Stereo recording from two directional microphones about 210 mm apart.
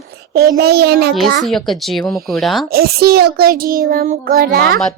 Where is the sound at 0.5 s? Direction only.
50° right (ahead or behind).